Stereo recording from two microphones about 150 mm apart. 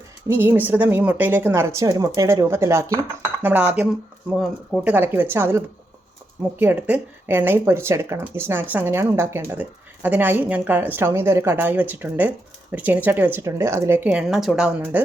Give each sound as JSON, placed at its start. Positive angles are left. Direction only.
{"t": 0.3, "sound": "speech", "side_deg": -15}